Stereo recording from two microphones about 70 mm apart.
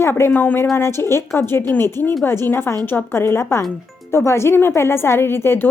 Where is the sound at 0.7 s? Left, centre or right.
Left.